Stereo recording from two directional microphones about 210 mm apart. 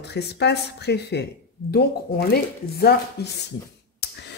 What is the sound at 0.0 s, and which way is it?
Speech, 55° left (ahead or behind).